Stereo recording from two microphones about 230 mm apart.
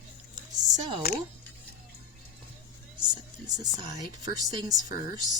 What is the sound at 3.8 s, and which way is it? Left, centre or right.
Speech, centre.